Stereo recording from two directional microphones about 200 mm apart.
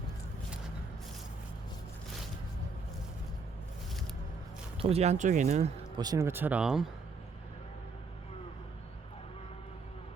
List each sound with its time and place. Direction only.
4.8 s speech: 30° right (ahead or behind)
6.0 s speech: 15° right (ahead or behind)